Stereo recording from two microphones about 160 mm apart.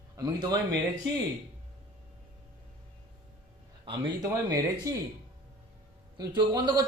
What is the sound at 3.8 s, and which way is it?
Speech, 25° right (ahead or behind).